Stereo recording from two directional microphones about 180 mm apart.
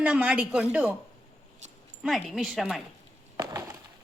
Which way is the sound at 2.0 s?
Centre (ahead or behind).